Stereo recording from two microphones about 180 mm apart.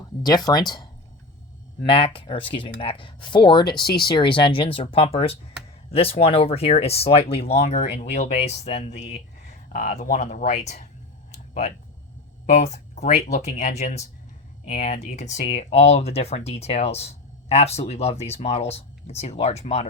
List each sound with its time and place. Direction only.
0.2 s speech: 20° left (ahead or behind)
1.9 s speech: 30° left (ahead or behind)
12.5 s speech: 40° left (ahead or behind)